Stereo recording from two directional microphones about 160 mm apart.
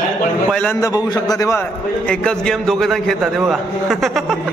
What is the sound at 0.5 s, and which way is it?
Speech, 5° left (ahead or behind).